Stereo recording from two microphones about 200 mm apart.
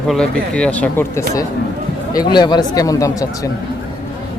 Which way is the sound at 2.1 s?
20° left (ahead or behind).